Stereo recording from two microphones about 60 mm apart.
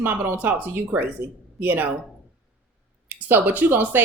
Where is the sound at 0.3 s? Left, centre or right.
Right.